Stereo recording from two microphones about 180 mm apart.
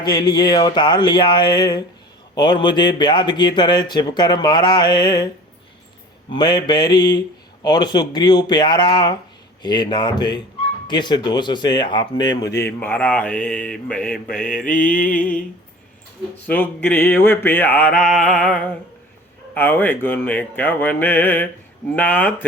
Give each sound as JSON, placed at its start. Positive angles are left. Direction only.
{"t": 0.0, "sound": "a man's voice", "side_deg": 25}
{"t": 6.3, "sound": "a man's voice", "side_deg": 25}
{"t": 14.3, "sound": "mantra", "side_deg": 50}
{"t": 16.5, "sound": "speech", "side_deg": 10}